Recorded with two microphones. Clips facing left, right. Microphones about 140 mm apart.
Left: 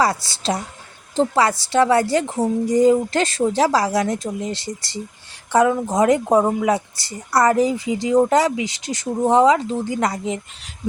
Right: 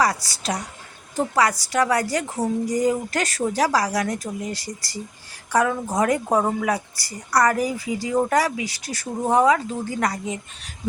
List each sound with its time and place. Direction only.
0.0 s a woman's voice: 25° left (ahead or behind)